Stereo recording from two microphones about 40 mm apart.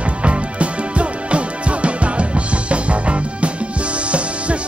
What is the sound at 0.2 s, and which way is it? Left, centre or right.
Music, right.